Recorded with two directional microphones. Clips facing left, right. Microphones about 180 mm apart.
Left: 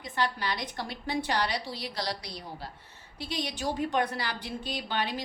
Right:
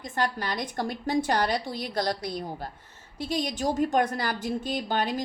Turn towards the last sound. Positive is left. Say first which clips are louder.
# right 5 dB
turn(degrees=-45)  # may be behind; listen again after turning